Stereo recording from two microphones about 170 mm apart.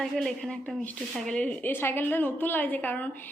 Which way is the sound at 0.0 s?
Centre (ahead or behind).